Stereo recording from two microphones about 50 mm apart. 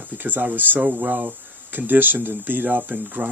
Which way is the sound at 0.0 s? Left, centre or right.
Right.